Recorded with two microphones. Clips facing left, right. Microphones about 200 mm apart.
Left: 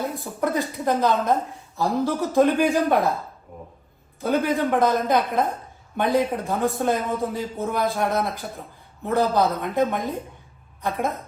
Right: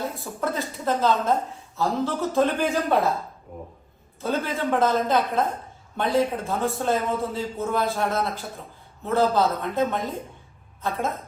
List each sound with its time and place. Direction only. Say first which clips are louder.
0.4 s a woman's voice: left 3 dB; 15° left (ahead or behind)
4.2 s a woman's voice: left 4 dB; 15° left (ahead or behind)